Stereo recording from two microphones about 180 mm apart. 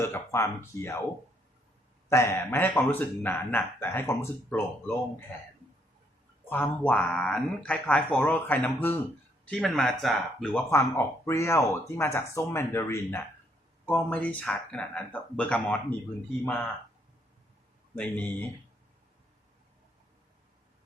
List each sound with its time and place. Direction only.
0.0 s speech: 15° left (ahead or behind)
2.0 s speech: 15° left (ahead or behind)
6.5 s speech: 10° left (ahead or behind)
17.9 s speech: 10° left (ahead or behind)